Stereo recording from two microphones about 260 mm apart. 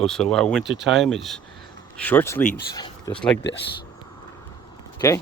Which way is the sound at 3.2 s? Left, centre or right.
Centre.